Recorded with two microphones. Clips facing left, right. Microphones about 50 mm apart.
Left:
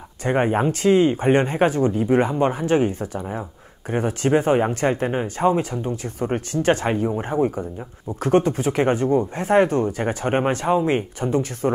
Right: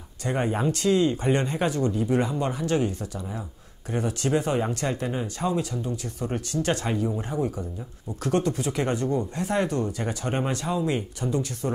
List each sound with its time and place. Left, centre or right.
0.2 s speech: left
3.2 s speech: left